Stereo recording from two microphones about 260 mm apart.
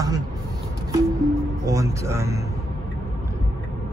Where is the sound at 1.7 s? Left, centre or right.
Centre.